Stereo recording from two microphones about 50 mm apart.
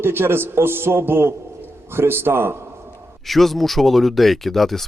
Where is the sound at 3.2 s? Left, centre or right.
Centre.